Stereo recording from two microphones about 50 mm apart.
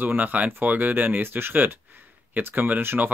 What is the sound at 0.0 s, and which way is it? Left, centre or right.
Speech, right.